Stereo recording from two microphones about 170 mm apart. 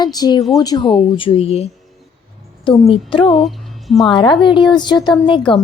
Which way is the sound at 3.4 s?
Centre (ahead or behind).